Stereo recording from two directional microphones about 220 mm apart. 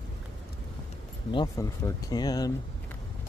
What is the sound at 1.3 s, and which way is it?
Speech, 15° left (ahead or behind).